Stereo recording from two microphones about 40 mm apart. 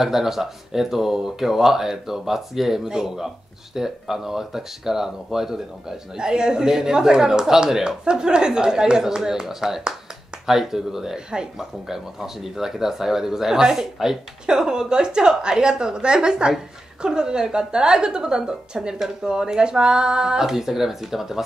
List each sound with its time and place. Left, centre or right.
0.0 s a woman's voice: centre
20.4 s speech: centre